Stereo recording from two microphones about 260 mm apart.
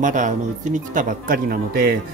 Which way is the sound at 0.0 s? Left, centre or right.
Right.